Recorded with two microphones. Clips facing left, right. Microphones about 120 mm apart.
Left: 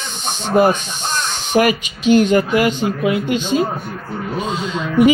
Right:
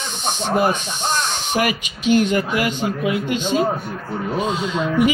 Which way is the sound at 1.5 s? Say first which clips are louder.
Left 7 dB; 30° left (ahead or behind).